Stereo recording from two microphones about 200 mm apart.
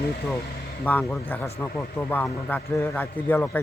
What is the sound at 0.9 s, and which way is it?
A man's voice, 10° left (ahead or behind).